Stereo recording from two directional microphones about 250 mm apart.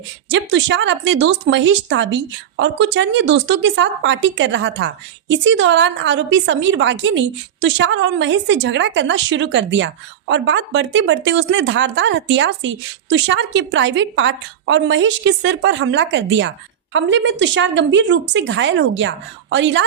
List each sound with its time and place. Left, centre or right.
0.3 s a woman's voice: right